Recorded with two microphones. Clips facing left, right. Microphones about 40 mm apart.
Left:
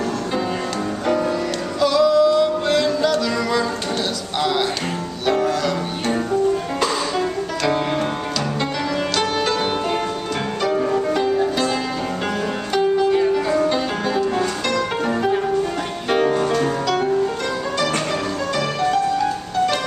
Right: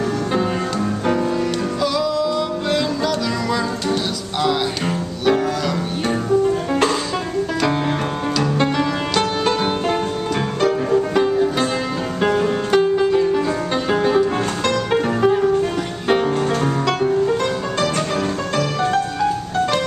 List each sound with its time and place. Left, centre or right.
1.8 s music: centre
13.7 s music: centre